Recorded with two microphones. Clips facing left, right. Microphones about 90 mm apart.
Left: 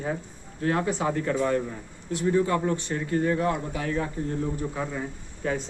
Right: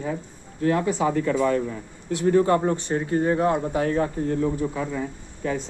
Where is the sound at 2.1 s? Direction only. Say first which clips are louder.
Right 5 dB; 75° right (ahead or behind).